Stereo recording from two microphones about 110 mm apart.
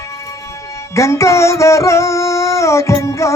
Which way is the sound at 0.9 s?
25° left (ahead or behind).